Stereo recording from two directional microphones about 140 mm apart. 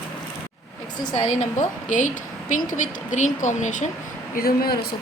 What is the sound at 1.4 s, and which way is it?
Speech, 60° left (ahead or behind).